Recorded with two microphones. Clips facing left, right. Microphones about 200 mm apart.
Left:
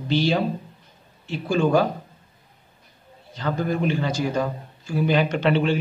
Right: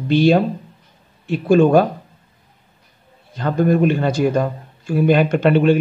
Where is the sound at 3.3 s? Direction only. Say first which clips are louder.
Right 8 dB; 55° right (ahead or behind).